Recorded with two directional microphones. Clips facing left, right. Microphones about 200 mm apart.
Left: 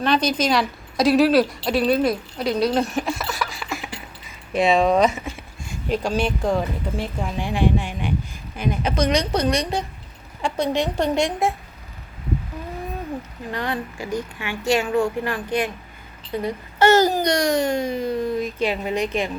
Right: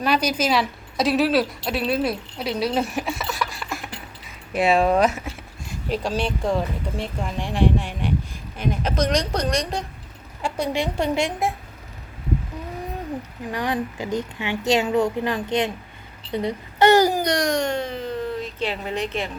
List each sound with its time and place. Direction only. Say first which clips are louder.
0.0 s a woman's voice: left 1 dB; 10° right (ahead or behind)
10.4 s a woman's voice: left 2 dB; 10° right (ahead or behind)
13.5 s speech: right 2 dB; 15° right (ahead or behind)
17.2 s speech: left 2 dB; centre (ahead or behind)